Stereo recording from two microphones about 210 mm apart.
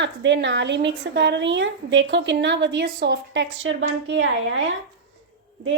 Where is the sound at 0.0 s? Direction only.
60° right (ahead or behind).